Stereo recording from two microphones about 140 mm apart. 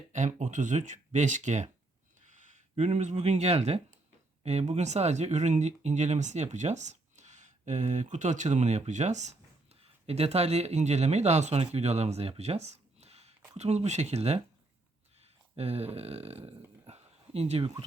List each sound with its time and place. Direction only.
0.1 s speech: 60° right (ahead or behind)